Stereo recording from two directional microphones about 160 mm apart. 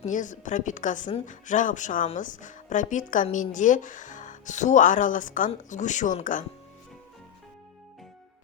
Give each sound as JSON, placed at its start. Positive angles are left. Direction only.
{"t": 0.0, "sound": "speech", "side_deg": 50}